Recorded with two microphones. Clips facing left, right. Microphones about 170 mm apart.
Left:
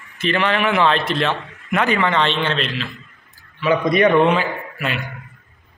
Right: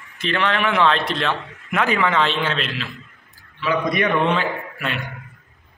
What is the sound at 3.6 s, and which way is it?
Speech, 25° left (ahead or behind).